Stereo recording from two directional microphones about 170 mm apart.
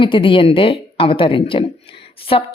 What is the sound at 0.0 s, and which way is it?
A woman's voice, 30° left (ahead or behind).